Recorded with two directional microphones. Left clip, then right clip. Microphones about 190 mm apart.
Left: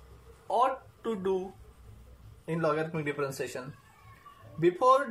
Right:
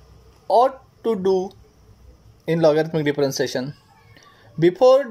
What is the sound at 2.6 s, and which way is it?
Speech, 40° right (ahead or behind).